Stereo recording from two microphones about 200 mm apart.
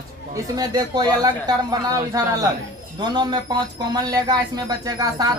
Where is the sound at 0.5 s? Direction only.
20° right (ahead or behind).